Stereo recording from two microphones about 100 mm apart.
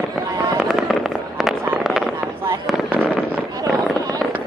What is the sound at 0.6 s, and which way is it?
Fireworks, centre (ahead or behind).